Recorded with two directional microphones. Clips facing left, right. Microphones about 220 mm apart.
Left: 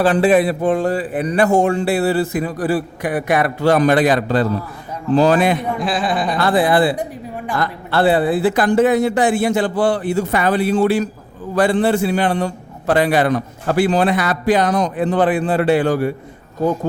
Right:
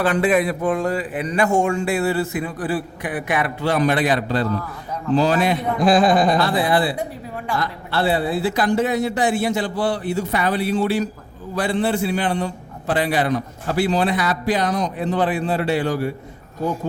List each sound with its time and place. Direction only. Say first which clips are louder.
0.0 s speech: left 4 dB; 30° left (ahead or behind); by 5.5 s 55° left (ahead or behind)
5.8 s a woman's voice: right 5 dB; 40° right (ahead or behind)
6.6 s speech: left 4 dB; 50° left (ahead or behind)